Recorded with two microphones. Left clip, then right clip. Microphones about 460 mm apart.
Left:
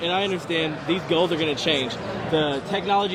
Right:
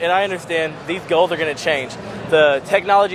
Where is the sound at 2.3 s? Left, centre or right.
Right.